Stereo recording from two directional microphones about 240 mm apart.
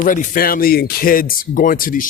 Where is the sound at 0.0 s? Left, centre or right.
Left.